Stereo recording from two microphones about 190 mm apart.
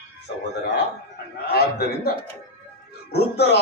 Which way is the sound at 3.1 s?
60° left (ahead or behind).